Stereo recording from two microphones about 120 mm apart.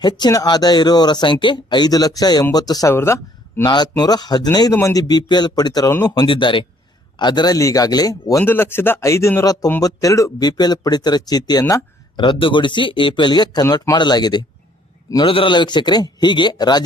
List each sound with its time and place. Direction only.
0.0 s speech: 35° left (ahead or behind)
2.9 s speech: 20° left (ahead or behind)
4.0 s speech: 35° left (ahead or behind)
6.2 s speech: 45° left (ahead or behind)
8.4 s speech: 20° left (ahead or behind)
12.1 s speech: 45° left (ahead or behind)